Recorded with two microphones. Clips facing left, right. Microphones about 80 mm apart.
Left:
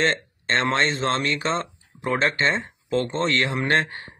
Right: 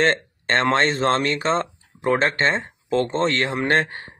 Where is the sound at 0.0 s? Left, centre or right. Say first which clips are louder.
Right 3 dB; right.